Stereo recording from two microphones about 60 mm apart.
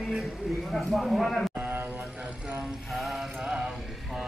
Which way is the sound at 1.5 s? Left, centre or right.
Right.